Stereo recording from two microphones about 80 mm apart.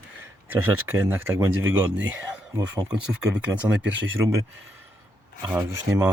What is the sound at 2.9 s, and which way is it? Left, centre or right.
Speech, centre.